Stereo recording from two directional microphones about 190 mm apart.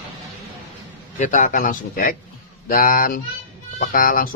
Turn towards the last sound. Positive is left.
turn(degrees=45)  # may be behind; listen again after turning